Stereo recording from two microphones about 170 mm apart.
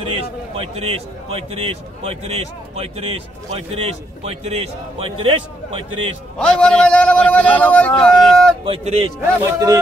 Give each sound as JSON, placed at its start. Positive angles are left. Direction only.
{"t": 0.0, "sound": "a man's voice", "side_deg": -35}
{"t": 6.3, "sound": "a man's voice", "side_deg": 5}
{"t": 8.6, "sound": "a man's voice", "side_deg": -35}
{"t": 9.4, "sound": "speech", "side_deg": -20}